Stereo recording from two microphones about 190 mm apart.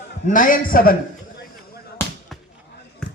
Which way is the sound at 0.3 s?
45° left (ahead or behind).